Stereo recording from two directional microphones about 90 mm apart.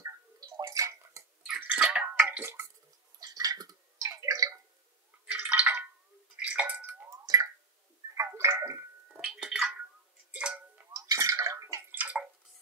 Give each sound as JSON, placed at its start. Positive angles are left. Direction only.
{"t": 0.0, "sound": "drip", "side_deg": -45}
{"t": 1.4, "sound": "a sound", "side_deg": -10}
{"t": 2.1, "sound": "tick-tock", "side_deg": -25}
{"t": 3.2, "sound": "a sound", "side_deg": -45}
{"t": 5.2, "sound": "drip", "side_deg": -15}
{"t": 8.1, "sound": "gargling", "side_deg": -35}
{"t": 9.2, "sound": "a sound", "side_deg": -5}
{"t": 10.3, "sound": "tick", "side_deg": -10}
{"t": 11.0, "sound": "bathtub", "side_deg": -40}
{"t": 11.9, "sound": "bathtub", "side_deg": -20}